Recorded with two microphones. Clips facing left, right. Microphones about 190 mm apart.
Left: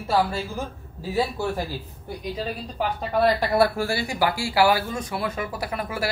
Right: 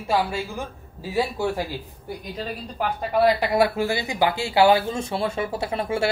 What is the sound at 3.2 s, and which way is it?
Speech, 15° right (ahead or behind).